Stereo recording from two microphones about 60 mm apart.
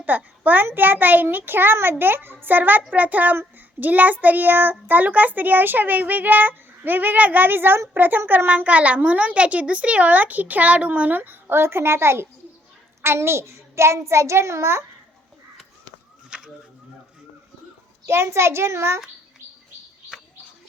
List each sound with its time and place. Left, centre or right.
0.0 s a child's voice: right
16.3 s a sound: centre
18.1 s a child's voice: right